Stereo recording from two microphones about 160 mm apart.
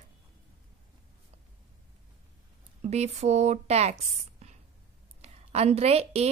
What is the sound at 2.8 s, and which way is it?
Speech, 45° right (ahead or behind).